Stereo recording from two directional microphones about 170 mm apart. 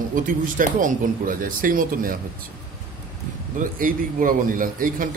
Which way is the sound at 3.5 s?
55° right (ahead or behind).